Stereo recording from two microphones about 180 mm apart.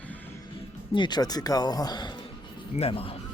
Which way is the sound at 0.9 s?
25° left (ahead or behind).